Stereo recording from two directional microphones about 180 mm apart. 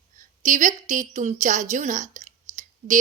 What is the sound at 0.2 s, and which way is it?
A woman's voice, 45° right (ahead or behind).